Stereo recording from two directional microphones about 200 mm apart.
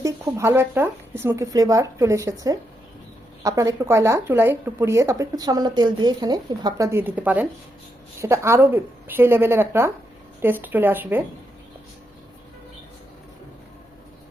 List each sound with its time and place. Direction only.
0.0 s speech: 15° right (ahead or behind)